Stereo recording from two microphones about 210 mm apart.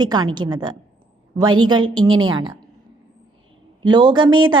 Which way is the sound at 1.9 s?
20° right (ahead or behind).